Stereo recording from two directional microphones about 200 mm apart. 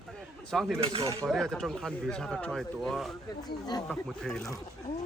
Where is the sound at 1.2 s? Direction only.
Centre (ahead or behind).